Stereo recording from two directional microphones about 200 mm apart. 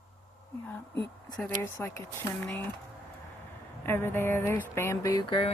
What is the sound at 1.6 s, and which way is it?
Speech, 15° left (ahead or behind).